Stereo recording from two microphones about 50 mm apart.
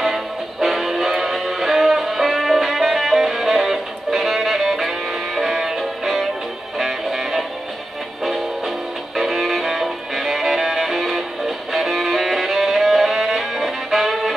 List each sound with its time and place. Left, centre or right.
0.0 s music: centre